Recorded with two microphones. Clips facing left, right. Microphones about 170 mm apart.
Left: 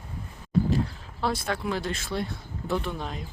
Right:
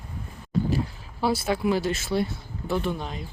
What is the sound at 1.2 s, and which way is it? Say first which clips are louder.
Speech: right 5 dB; 5° right (ahead or behind).